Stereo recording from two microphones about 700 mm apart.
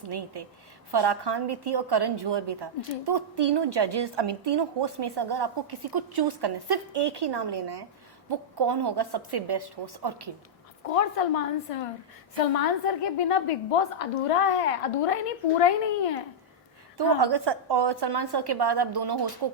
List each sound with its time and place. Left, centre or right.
0.9 s a woman's voice: right
10.8 s speech: left
17.2 s a woman's voice: right